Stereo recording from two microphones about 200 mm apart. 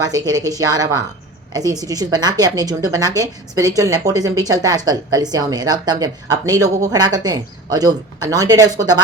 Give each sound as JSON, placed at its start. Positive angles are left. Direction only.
{"t": 0.3, "sound": "a woman's voice", "side_deg": -20}